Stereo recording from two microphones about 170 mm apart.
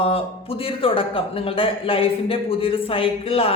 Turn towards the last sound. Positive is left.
turn(degrees=35)  # may be behind; listen again after turning